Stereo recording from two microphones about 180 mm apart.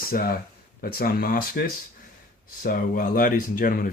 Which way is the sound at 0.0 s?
55° left (ahead or behind).